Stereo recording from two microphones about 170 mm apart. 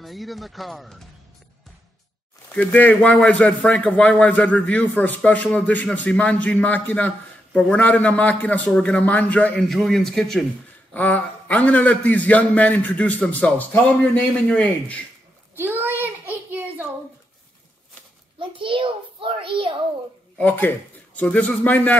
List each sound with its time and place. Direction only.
0.0 s speech: centre (ahead or behind)
2.5 s speech: 10° left (ahead or behind)
15.5 s a sound: 10° right (ahead or behind)
18.4 s a child's voice: 30° right (ahead or behind)
20.3 s a man's voice: 10° left (ahead or behind)